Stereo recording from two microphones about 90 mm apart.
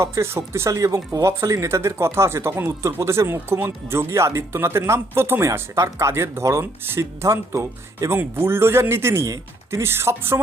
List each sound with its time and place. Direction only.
0.0 s speech: 30° right (ahead or behind)